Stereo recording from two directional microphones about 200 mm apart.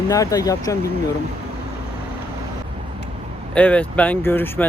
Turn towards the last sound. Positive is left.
turn(degrees=10)  # may be behind; listen again after turning